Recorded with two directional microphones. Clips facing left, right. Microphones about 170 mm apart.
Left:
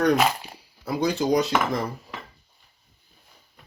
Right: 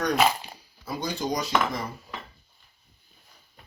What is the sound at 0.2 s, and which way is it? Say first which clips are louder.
Dog: even; centre (ahead or behind).